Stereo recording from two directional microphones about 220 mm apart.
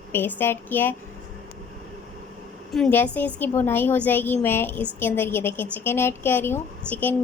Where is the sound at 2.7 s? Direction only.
5° left (ahead or behind).